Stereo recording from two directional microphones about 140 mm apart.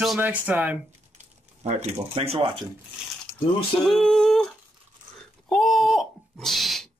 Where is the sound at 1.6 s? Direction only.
50° right (ahead or behind).